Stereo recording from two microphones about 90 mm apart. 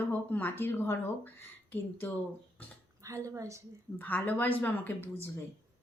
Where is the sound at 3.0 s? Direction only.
35° right (ahead or behind).